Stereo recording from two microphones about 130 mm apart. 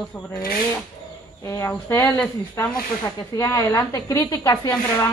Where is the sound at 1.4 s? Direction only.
20° left (ahead or behind).